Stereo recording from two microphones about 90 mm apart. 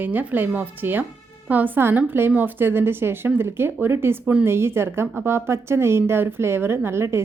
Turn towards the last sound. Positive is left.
turn(degrees=-30)  # may be behind; listen again after turning